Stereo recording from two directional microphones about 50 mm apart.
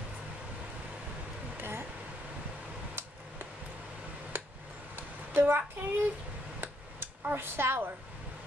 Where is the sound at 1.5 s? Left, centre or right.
Right.